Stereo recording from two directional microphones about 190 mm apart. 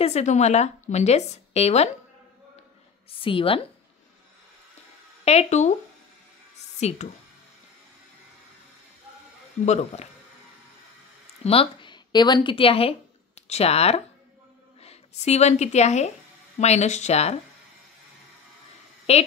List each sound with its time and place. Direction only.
0.0 s a woman's voice: 35° left (ahead or behind)
3.1 s a woman's voice: 30° left (ahead or behind)
5.2 s a woman's voice: 35° left (ahead or behind)
6.8 s speech: 35° left (ahead or behind)
9.7 s a woman's voice: 35° left (ahead or behind)
11.4 s a woman's voice: 30° left (ahead or behind)
19.1 s a woman's voice: 35° left (ahead or behind)